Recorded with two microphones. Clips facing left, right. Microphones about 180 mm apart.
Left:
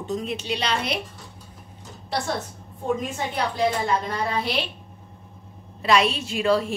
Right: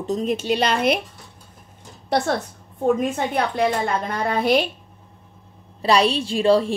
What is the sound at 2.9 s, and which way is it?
A woman's voice, 60° right (ahead or behind).